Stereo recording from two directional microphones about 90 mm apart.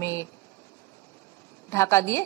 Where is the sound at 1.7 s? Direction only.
30° left (ahead or behind).